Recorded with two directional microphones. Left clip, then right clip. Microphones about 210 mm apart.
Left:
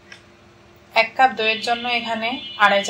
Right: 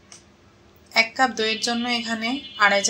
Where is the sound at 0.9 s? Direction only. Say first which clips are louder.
Left 4 dB; 40° right (ahead or behind).